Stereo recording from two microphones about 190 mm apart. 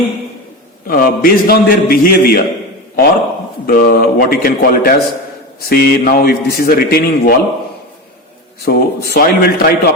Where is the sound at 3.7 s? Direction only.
50° left (ahead or behind).